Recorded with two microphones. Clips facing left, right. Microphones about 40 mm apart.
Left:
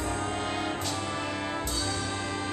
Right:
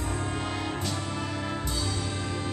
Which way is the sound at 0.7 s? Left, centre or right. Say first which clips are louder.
Even; centre.